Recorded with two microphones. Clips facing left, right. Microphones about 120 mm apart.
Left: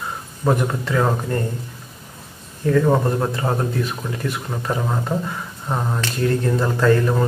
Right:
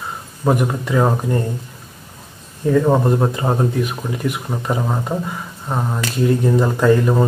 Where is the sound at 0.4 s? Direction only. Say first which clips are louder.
Right 2 dB; 10° right (ahead or behind).